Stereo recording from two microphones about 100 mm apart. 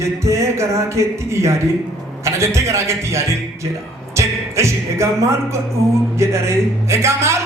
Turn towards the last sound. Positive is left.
turn(degrees=-30)  # may be behind; listen again after turning